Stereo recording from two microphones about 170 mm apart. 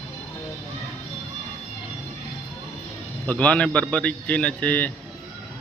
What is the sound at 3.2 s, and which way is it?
Speech, 10° left (ahead or behind).